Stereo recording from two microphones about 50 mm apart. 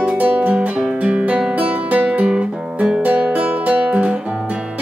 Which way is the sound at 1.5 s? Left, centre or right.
Right.